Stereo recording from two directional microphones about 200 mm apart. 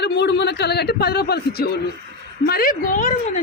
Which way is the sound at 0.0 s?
60° left (ahead or behind).